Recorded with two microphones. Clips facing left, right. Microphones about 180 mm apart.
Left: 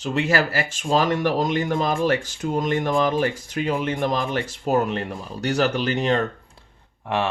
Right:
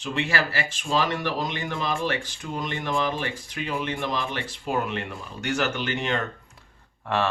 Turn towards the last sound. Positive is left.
turn(degrees=15)  # may be behind; listen again after turning